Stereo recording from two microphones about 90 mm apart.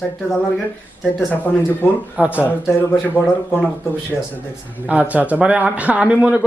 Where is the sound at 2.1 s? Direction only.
15° right (ahead or behind).